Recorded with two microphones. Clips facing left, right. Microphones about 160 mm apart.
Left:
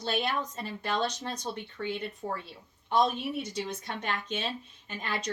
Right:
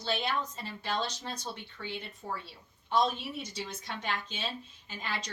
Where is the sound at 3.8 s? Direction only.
55° left (ahead or behind).